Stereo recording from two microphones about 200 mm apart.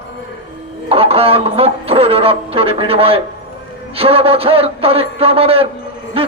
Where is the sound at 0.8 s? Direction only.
30° right (ahead or behind).